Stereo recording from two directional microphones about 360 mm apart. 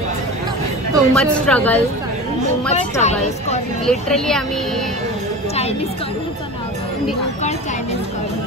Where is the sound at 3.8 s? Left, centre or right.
Centre.